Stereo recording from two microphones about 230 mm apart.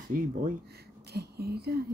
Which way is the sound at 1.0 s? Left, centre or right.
Right.